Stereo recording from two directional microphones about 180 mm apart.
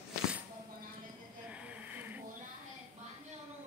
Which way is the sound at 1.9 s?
10° right (ahead or behind).